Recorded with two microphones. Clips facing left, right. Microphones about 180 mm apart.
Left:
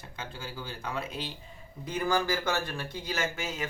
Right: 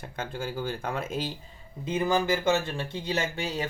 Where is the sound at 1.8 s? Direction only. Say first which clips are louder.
Right 3 dB; 20° right (ahead or behind).